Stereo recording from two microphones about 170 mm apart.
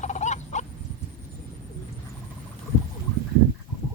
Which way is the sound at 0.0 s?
45° left (ahead or behind).